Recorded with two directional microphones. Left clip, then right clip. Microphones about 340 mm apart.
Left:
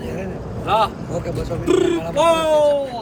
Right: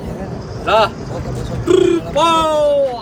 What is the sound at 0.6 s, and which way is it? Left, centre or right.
Speech, right.